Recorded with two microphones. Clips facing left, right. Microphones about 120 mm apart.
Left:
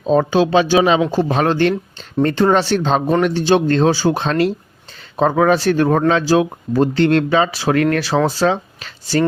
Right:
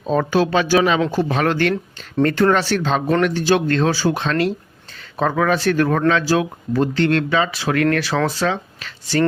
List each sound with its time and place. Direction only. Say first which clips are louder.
0.0 s speech: left 3 dB; 25° left (ahead or behind)